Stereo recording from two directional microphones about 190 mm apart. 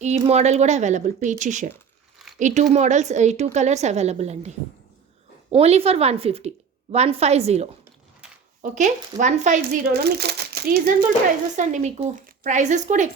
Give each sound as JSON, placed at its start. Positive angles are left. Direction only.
{"t": 0.0, "sound": "a woman's voice", "side_deg": -35}
{"t": 2.2, "sound": "a sound", "side_deg": 0}
{"t": 2.7, "sound": "a woman's voice", "side_deg": -40}
{"t": 9.9, "sound": "speech", "side_deg": -55}
{"t": 11.5, "sound": "a woman's voice", "side_deg": -40}